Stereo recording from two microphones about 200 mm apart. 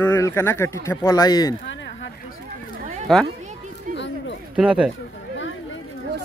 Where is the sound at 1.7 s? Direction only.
65° left (ahead or behind).